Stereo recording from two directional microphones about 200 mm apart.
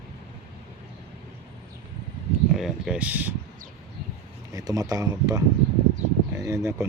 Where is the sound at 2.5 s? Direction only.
Centre (ahead or behind).